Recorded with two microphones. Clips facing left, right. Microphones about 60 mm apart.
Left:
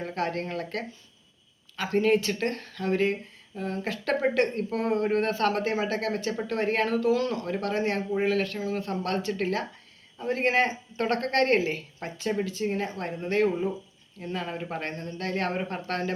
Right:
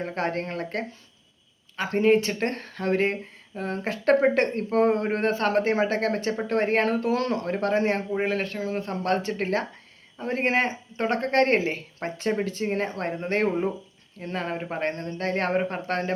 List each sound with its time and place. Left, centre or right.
0.0 s speech: right